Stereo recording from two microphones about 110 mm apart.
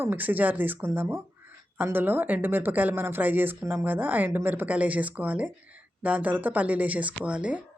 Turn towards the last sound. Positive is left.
turn(degrees=-10)  # may be behind; listen again after turning